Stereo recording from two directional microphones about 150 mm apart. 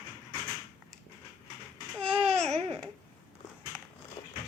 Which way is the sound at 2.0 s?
40° right (ahead or behind).